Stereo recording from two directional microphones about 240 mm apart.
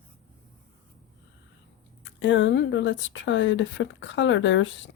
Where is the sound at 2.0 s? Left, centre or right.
Left.